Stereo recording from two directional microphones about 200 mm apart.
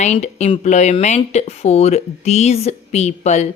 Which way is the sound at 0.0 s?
35° left (ahead or behind).